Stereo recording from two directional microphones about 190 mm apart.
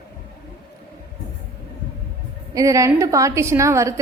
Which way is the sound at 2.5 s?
20° right (ahead or behind).